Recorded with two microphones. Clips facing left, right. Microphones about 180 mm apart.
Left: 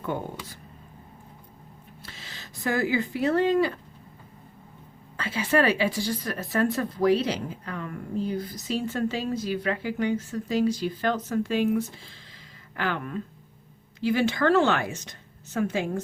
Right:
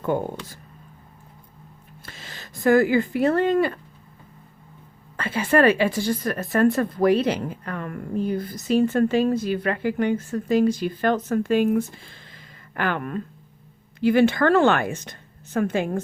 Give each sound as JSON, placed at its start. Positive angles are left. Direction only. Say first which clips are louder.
{"t": 2.0, "sound": "speech", "louder": "right 4 dB", "side_deg": -50}
{"t": 5.1, "sound": "a woman's voice", "louder": "right 4 dB", "side_deg": -55}